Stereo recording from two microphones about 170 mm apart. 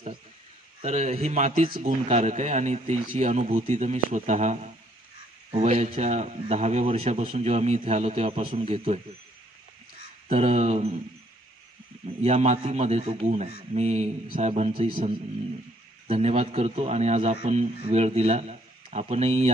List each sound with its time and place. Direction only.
0.8 s a man's voice: 40° right (ahead or behind)
10.3 s a man's voice: 40° right (ahead or behind)
12.2 s a man's voice: 40° right (ahead or behind)
16.1 s a man's voice: 40° right (ahead or behind)